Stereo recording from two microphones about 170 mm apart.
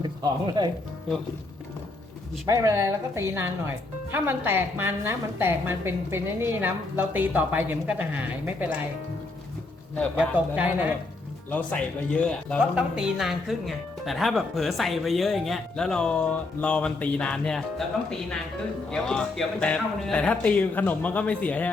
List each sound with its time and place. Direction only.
0.0 s speech: 25° right (ahead or behind)
2.5 s a woman's voice: 20° right (ahead or behind)
10.2 s a woman's voice: 10° right (ahead or behind)
11.5 s speech: 5° left (ahead or behind)